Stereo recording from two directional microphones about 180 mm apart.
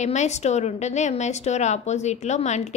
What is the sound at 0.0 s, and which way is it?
A woman's voice, 40° left (ahead or behind).